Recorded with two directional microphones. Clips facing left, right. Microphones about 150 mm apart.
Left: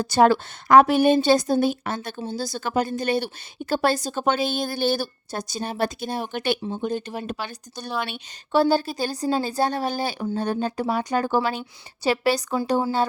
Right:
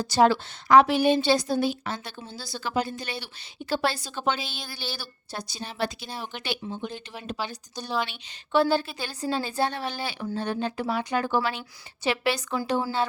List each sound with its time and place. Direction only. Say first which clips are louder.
0.0 s a woman's voice: left 3 dB; 50° left (ahead or behind)
8.5 s speech: left 3 dB; 40° left (ahead or behind)